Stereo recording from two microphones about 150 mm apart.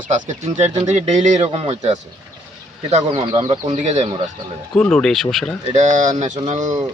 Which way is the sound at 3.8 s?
50° right (ahead or behind).